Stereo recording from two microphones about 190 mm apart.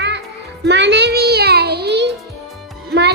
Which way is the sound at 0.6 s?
65° right (ahead or behind).